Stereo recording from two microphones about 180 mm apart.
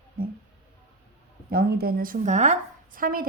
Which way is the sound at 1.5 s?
55° right (ahead or behind).